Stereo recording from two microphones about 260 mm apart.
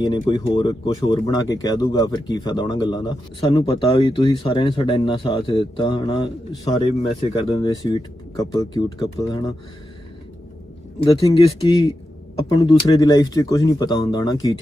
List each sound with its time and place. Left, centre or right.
0.0 s speech: centre
11.1 s speech: left